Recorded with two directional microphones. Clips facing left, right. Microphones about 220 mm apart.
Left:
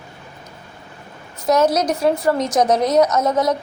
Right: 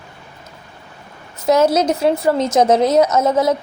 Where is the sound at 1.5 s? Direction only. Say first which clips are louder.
Right 2 dB; 25° right (ahead or behind).